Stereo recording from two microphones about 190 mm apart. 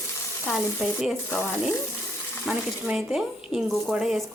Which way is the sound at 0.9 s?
Centre (ahead or behind).